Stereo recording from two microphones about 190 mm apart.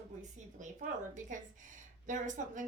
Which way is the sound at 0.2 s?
40° right (ahead or behind).